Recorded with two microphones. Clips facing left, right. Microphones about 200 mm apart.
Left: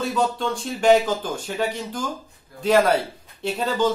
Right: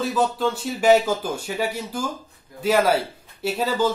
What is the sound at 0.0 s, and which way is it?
Speech, centre (ahead or behind).